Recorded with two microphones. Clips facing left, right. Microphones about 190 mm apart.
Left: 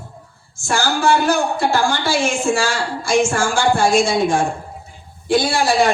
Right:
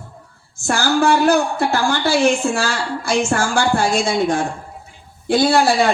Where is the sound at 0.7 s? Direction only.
60° right (ahead or behind).